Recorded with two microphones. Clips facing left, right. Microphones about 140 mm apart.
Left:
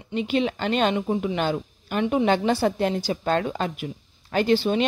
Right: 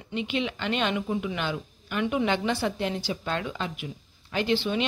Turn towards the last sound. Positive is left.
turn(degrees=40)  # may be behind; listen again after turning